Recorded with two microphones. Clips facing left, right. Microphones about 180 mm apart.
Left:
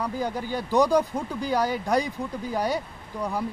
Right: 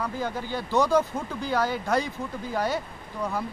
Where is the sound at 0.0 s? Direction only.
15° left (ahead or behind).